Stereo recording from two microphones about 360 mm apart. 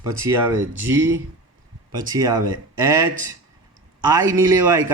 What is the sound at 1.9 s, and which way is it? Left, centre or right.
A man's voice, centre.